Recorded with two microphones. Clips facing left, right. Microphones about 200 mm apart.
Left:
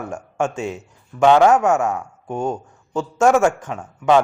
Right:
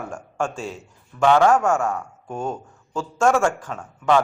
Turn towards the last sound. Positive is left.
turn(degrees=20)  # may be behind; listen again after turning